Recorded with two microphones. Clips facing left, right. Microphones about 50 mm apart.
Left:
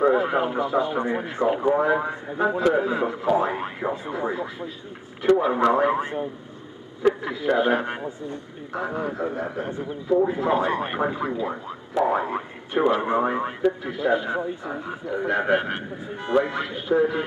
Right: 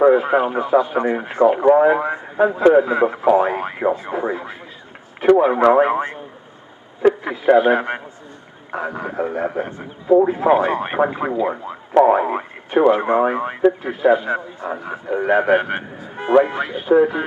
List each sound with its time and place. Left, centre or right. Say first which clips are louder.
0.0 s speech: right 6 dB; right
7.2 s speech: right 7 dB; right